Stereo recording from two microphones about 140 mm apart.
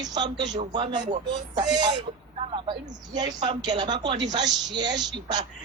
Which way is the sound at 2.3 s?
35° right (ahead or behind).